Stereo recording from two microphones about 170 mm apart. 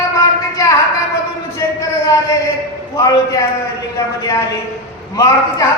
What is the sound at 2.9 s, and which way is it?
Speech, 20° left (ahead or behind).